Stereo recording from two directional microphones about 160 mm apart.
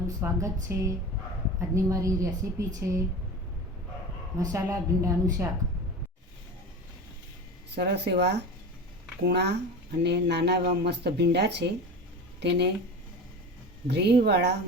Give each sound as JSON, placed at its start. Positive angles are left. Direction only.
{"t": 0.2, "sound": "a woman's voice", "side_deg": -20}
{"t": 1.7, "sound": "a woman's voice", "side_deg": -20}
{"t": 4.4, "sound": "a woman's voice", "side_deg": -20}
{"t": 7.8, "sound": "speech", "side_deg": -90}
{"t": 13.8, "sound": "speech", "side_deg": -90}